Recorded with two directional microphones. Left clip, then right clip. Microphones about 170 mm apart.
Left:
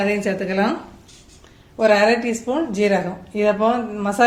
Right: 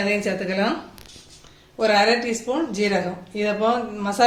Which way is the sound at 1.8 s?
50° left (ahead or behind).